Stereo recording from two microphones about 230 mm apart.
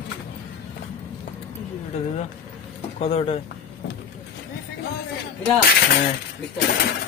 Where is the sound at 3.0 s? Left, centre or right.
Left.